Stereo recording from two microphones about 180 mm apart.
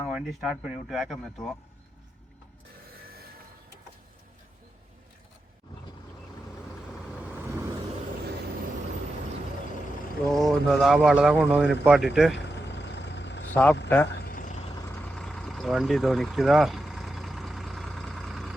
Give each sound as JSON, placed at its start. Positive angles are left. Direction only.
{"t": 0.0, "sound": "speech", "side_deg": 0}
{"t": 10.2, "sound": "speech", "side_deg": 0}
{"t": 12.5, "sound": "vehicle", "side_deg": 75}
{"t": 13.5, "sound": "speech", "side_deg": 10}
{"t": 14.1, "sound": "vehicle", "side_deg": 60}
{"t": 14.8, "sound": "vehicle", "side_deg": 15}
{"t": 15.1, "sound": "vehicle", "side_deg": 5}